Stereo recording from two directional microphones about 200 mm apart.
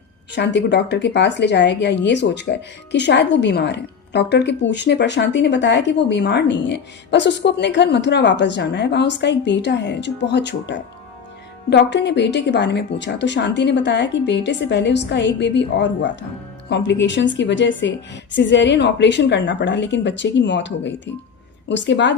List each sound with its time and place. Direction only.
0.3 s a woman's voice: 60° left (ahead or behind)